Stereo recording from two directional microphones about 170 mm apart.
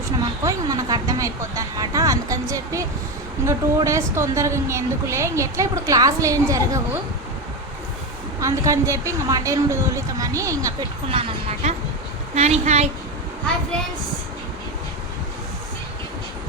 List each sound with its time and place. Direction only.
0.4 s a woman's voice: 20° right (ahead or behind)
8.4 s a woman's voice: 20° right (ahead or behind)
11.1 s speech: 35° right (ahead or behind)